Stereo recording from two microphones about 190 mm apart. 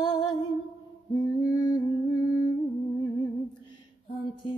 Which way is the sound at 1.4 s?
20° left (ahead or behind).